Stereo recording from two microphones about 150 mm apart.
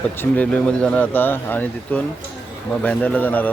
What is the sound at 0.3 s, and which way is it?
Speech, 10° left (ahead or behind).